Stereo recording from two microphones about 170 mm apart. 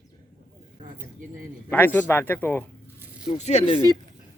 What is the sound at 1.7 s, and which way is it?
Speech, 10° left (ahead or behind).